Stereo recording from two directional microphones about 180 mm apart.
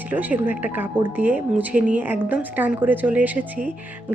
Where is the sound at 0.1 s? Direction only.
10° right (ahead or behind).